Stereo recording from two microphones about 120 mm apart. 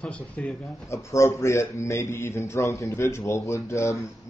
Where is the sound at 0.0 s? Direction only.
10° left (ahead or behind).